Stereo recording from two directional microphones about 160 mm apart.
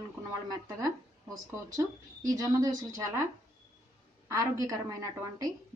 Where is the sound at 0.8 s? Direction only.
20° right (ahead or behind).